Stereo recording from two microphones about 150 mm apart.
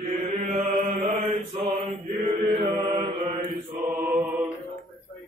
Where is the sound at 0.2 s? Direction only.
50° right (ahead or behind).